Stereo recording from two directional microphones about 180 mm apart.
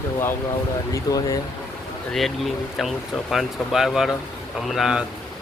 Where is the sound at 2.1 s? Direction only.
Centre (ahead or behind).